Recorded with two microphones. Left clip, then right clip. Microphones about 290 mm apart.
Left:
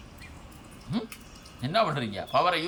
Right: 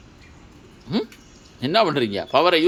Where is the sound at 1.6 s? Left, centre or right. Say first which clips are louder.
Right 7 dB; centre.